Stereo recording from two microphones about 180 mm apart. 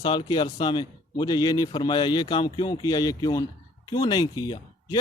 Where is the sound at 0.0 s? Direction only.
25° left (ahead or behind).